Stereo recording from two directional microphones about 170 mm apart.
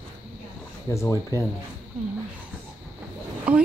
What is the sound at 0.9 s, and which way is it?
Speech, 20° left (ahead or behind).